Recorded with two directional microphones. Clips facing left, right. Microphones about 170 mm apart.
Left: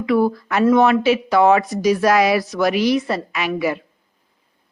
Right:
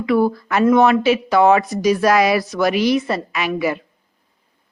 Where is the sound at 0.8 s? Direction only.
30° left (ahead or behind).